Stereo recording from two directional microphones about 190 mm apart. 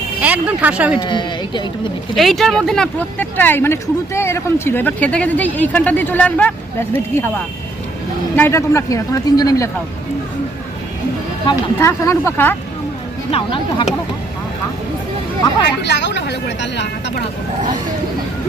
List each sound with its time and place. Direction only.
0.2 s speech: 10° right (ahead or behind)
0.9 s speech: 25° left (ahead or behind)
2.1 s speech: centre (ahead or behind)
8.4 s speech: 15° left (ahead or behind)
11.4 s speech: 15° left (ahead or behind)
13.3 s speech: 30° left (ahead or behind)
15.8 s speech: 65° left (ahead or behind)